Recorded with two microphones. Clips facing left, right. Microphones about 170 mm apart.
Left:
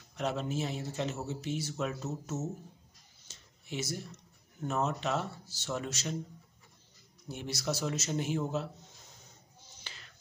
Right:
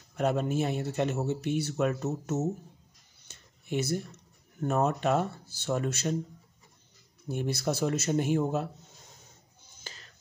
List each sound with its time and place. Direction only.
0.1 s a man's voice: 55° right (ahead or behind)
3.3 s a sound: 60° right (ahead or behind)
4.6 s speech: 55° right (ahead or behind)
7.2 s speech: 55° right (ahead or behind)
9.8 s music: 40° right (ahead or behind)